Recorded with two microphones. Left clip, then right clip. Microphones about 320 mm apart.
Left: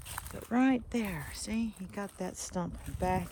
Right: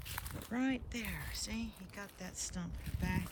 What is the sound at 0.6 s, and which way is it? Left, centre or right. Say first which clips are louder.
Speech: left 9 dB; centre.